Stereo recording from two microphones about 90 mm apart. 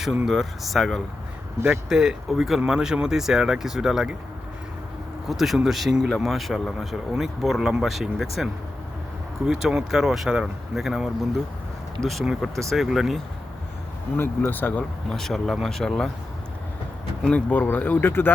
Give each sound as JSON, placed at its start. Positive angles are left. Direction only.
{"t": 0.3, "sound": "speech", "side_deg": 0}
{"t": 5.3, "sound": "speech", "side_deg": 0}
{"t": 9.5, "sound": "speech", "side_deg": -5}
{"t": 14.2, "sound": "speech", "side_deg": 25}
{"t": 15.1, "sound": "speech", "side_deg": 5}
{"t": 17.2, "sound": "speech", "side_deg": 15}